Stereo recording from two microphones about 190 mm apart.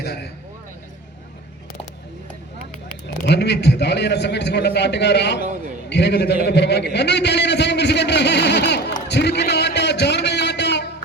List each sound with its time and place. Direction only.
0.0 s vehicle: 60° left (ahead or behind)
3.2 s a man's voice: 65° left (ahead or behind)
9.0 s a sound: 60° left (ahead or behind)